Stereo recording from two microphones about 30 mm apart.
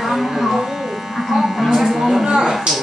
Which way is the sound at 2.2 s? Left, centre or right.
Right.